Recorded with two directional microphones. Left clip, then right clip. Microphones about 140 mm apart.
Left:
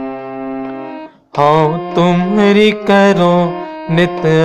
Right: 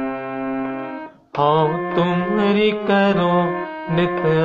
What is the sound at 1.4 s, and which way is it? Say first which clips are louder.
Music: left 6 dB; 50° left (ahead or behind).